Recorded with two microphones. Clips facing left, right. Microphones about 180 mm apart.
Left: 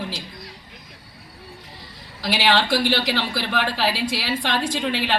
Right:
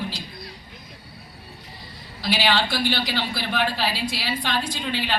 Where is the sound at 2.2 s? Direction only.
90° left.